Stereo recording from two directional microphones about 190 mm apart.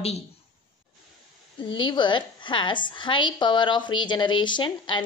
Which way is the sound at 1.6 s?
25° left (ahead or behind).